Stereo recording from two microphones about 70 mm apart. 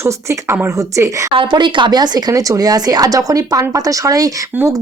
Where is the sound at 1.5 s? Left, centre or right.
Right.